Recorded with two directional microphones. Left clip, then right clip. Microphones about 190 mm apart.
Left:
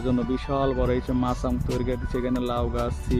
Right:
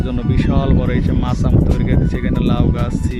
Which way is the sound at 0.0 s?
5° left (ahead or behind).